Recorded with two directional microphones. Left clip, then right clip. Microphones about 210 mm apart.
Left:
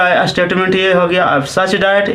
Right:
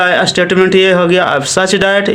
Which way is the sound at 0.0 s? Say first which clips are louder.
Right 1 dB; 45° right (ahead or behind).